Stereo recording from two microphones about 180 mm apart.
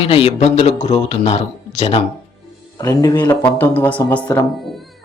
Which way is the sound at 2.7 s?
20° left (ahead or behind).